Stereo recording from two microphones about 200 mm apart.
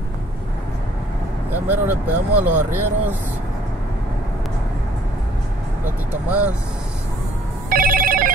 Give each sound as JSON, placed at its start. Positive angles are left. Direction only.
{"t": 1.5, "sound": "speech", "side_deg": -10}
{"t": 6.2, "sound": "speech", "side_deg": -5}
{"t": 7.7, "sound": "telephone bell ringing", "side_deg": -45}